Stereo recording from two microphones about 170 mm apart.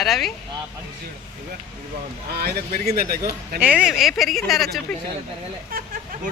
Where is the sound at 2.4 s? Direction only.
60° right (ahead or behind).